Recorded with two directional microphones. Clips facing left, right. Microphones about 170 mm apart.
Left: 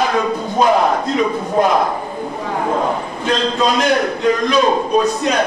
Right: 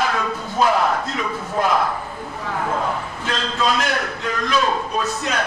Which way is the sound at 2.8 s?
20° left (ahead or behind).